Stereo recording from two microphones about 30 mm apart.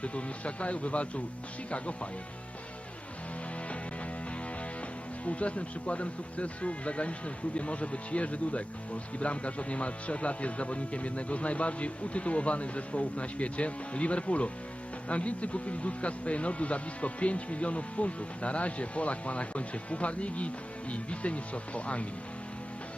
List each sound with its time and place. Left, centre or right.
0.0 s speech: left
5.2 s speech: left